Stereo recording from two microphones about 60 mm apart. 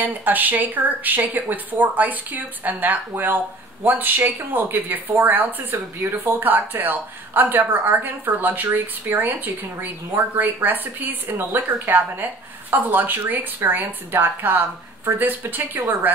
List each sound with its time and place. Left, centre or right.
0.0 s speech: right